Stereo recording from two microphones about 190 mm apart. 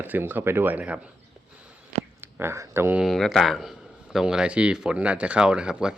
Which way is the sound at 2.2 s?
10° right (ahead or behind).